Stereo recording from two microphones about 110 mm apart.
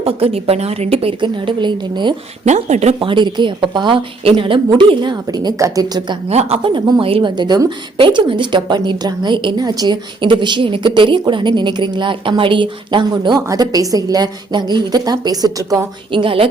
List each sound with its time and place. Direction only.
0.0 s a woman's voice: 65° right (ahead or behind); by 2.1 s 45° right (ahead or behind)
2.4 s speech: 90° right
3.0 s a woman's voice: 50° right (ahead or behind)
6.2 s a woman's voice: 65° right (ahead or behind); by 15.9 s 30° right (ahead or behind)
16.1 s a woman's voice: 55° right (ahead or behind)